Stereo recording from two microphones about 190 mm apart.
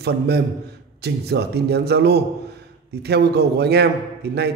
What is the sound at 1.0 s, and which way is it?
A man's voice, 60° right (ahead or behind).